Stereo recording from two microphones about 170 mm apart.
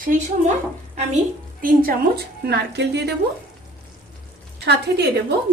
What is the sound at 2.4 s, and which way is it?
Speech, 80° right.